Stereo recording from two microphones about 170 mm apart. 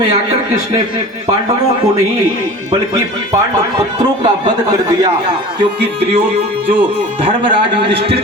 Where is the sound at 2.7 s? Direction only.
20° right (ahead or behind).